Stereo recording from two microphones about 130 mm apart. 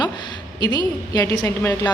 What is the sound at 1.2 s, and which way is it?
Speech, 20° left (ahead or behind).